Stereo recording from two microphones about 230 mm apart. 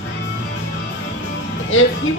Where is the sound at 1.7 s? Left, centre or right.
Left.